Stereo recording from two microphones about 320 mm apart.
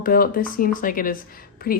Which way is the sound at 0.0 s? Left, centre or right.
Left.